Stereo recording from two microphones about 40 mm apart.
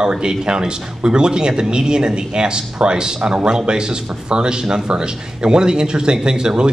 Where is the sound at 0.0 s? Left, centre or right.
Right.